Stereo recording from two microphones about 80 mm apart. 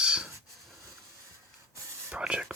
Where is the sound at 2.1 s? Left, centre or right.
Centre.